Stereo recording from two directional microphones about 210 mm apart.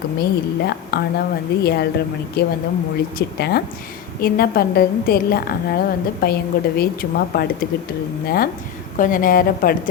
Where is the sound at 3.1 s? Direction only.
45° left (ahead or behind).